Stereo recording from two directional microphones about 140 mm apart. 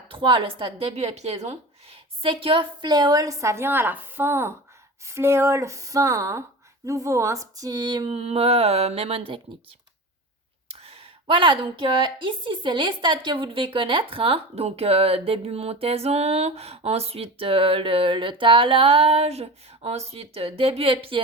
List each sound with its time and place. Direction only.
0.1 s speech: 40° right (ahead or behind)
2.2 s a woman's voice: 40° right (ahead or behind)
8.1 s speech: 45° right (ahead or behind)
10.7 s a woman's voice: 45° right (ahead or behind)